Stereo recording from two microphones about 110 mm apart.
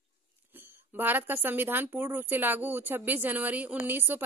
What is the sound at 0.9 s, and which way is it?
Speech, 15° right (ahead or behind).